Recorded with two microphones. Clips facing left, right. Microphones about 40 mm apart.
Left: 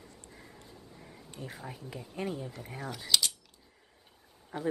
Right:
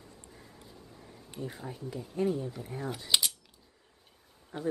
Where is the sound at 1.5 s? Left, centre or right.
Centre.